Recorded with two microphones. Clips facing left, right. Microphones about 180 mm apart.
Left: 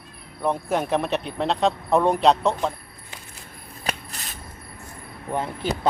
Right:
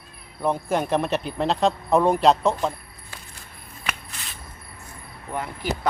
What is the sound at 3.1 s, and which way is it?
Coin, 20° left (ahead or behind).